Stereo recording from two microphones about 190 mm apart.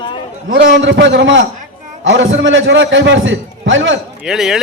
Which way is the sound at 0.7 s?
70° right (ahead or behind).